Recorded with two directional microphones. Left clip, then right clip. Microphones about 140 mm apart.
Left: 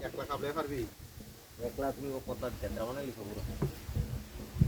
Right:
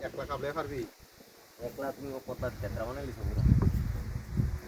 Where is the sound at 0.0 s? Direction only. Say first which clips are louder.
Right 1 dB; 30° left (ahead or behind).